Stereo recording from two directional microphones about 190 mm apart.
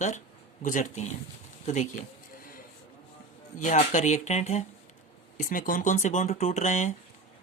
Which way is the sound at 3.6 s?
40° left (ahead or behind).